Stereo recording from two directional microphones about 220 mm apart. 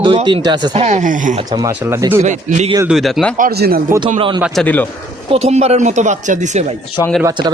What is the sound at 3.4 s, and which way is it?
Speech, 45° right (ahead or behind).